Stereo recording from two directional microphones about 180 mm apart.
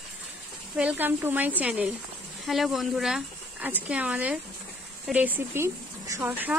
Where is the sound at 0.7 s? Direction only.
10° right (ahead or behind).